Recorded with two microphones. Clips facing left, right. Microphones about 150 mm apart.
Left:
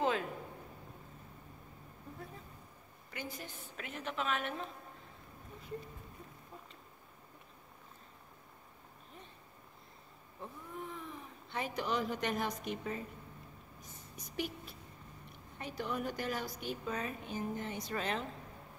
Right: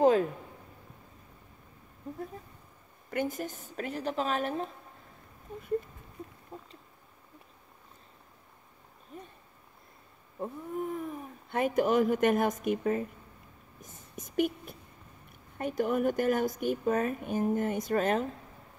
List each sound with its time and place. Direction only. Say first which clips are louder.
0.0 s a sound: right 10 dB; 40° right (ahead or behind)
3.1 s a woman's voice: right 12 dB; 50° right (ahead or behind)
6.5 s a sound: right 7 dB; 30° right (ahead or behind)
10.4 s speech: right 11 dB; 45° right (ahead or behind)
13.7 s whispering: right 10 dB; 50° right (ahead or behind)
15.5 s a woman's voice: right 10 dB; 45° right (ahead or behind)